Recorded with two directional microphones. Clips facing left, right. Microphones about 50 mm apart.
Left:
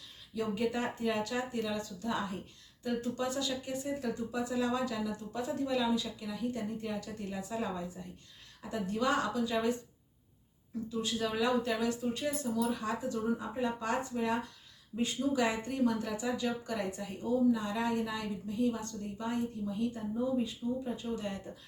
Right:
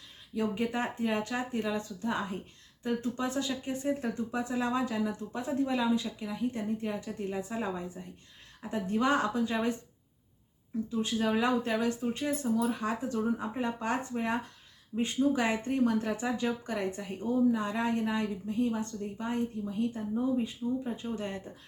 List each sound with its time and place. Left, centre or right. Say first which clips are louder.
0.3 s speech: right 2 dB; right
8.7 s speech: right 3 dB; right
11.0 s speech: right 3 dB; right
20.4 s speech: right 2 dB; right